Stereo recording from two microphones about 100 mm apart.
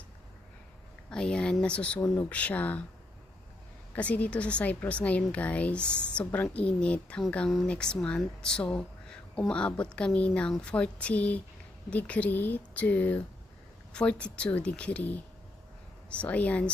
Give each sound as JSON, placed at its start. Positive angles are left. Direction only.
{"t": 1.1, "sound": "speech", "side_deg": 10}
{"t": 2.0, "sound": "speech", "side_deg": 25}
{"t": 2.3, "sound": "speech", "side_deg": 15}
{"t": 3.9, "sound": "speech", "side_deg": 15}